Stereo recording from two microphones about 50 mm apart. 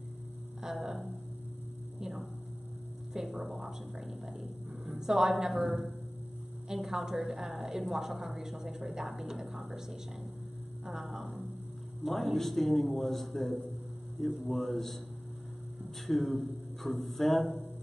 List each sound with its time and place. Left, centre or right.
0.6 s a sound: centre
2.0 s hum: centre
3.1 s speech: centre
5.0 s a woman's voice: centre
16.1 s speech: centre